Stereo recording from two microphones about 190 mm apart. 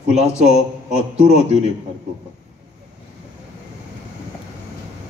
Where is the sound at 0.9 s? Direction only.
35° right (ahead or behind).